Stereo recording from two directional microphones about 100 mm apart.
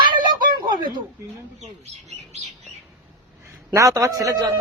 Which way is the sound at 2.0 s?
90° right.